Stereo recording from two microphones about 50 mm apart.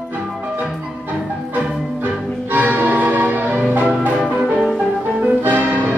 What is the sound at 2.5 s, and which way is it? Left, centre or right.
Music, right.